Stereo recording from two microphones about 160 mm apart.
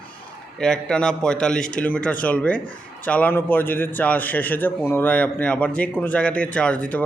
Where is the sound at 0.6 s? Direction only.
5° left (ahead or behind).